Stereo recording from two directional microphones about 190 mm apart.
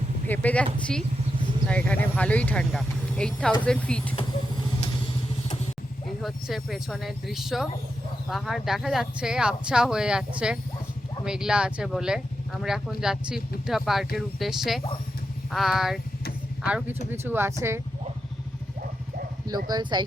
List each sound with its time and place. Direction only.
0.3 s speech: 5° left (ahead or behind)
6.2 s speech: centre (ahead or behind)
19.5 s speech: 20° right (ahead or behind)